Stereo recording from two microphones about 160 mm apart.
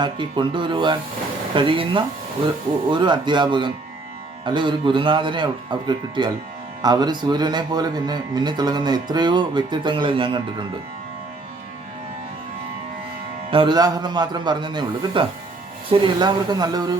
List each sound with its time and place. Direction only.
0.0 s speech: 30° right (ahead or behind)
13.5 s speech: 30° right (ahead or behind)